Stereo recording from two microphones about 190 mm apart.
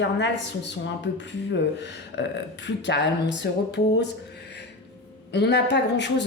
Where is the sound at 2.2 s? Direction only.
70° left (ahead or behind).